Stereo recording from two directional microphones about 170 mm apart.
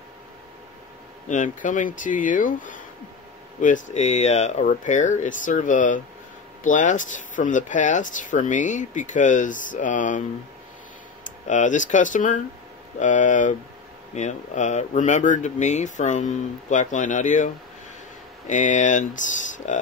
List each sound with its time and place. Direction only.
1.3 s speech: 50° left (ahead or behind)
11.2 s speech: 45° left (ahead or behind)
18.5 s speech: 45° left (ahead or behind)